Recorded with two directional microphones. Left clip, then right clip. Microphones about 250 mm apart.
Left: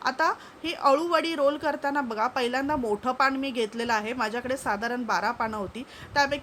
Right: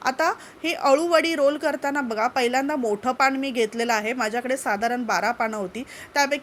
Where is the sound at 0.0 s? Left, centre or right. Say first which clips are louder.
Right 3 dB; centre.